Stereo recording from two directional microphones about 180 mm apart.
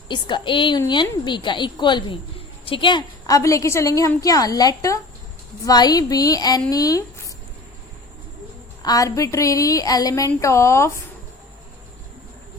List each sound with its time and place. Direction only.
0.1 s a woman's voice: 25° left (ahead or behind)
8.8 s a woman's voice: 20° left (ahead or behind)